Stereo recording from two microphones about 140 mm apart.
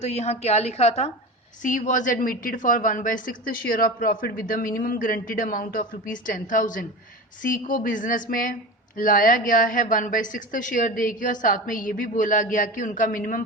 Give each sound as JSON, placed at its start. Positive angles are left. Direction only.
{"t": 0.0, "sound": "a woman's voice", "side_deg": 50}
{"t": 1.6, "sound": "a woman's voice", "side_deg": 70}
{"t": 4.8, "sound": "a woman's voice", "side_deg": 80}